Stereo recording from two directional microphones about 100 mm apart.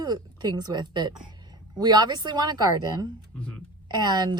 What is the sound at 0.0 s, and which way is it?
A woman's voice, 45° right (ahead or behind).